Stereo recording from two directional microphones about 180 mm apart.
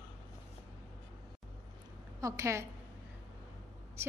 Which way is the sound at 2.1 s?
15° right (ahead or behind).